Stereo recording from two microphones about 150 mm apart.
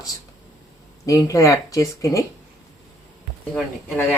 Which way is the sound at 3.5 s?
10° left (ahead or behind).